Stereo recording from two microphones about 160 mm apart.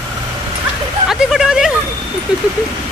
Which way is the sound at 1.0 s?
5° right (ahead or behind).